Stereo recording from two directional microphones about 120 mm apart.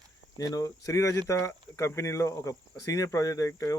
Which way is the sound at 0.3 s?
30° left (ahead or behind).